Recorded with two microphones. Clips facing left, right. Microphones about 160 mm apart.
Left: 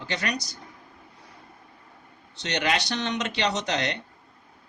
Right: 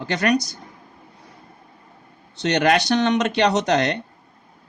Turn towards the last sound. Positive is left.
turn(degrees=-50)  # may be behind; listen again after turning